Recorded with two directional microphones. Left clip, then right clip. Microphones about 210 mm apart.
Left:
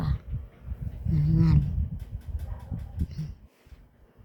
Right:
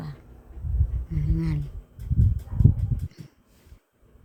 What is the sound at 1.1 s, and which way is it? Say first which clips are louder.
Speech: left 3 dB; 20° left (ahead or behind).